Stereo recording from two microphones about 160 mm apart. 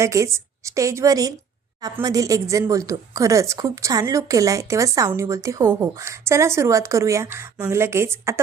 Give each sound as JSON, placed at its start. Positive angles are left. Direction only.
{"t": 0.0, "sound": "a woman's voice", "side_deg": -20}